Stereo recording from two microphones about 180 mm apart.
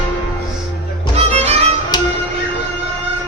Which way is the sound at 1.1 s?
35° right (ahead or behind).